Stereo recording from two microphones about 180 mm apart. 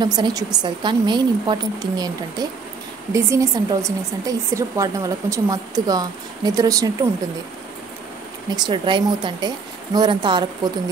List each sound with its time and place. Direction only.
0.0 s speech: 20° right (ahead or behind)
8.5 s speech: 25° right (ahead or behind)